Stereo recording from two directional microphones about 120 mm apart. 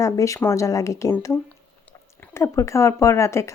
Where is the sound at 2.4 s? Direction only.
25° left (ahead or behind).